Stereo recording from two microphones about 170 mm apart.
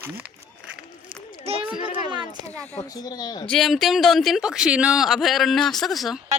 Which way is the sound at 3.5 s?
Centre (ahead or behind).